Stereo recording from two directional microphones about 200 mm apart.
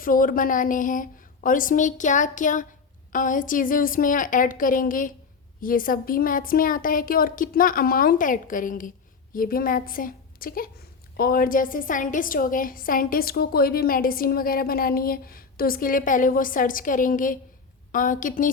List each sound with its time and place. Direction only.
0.0 s a woman's voice: 45° left (ahead or behind)